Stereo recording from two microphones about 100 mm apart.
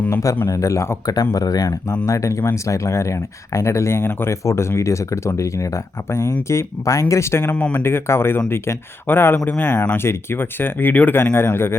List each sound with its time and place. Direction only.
0.4 s speech: 30° left (ahead or behind)